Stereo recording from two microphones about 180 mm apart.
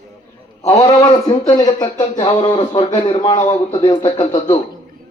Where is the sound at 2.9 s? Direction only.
40° left (ahead or behind).